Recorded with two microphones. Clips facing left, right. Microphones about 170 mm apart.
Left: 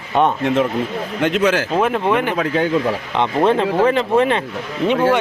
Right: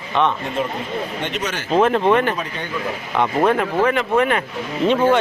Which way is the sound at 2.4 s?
90° left.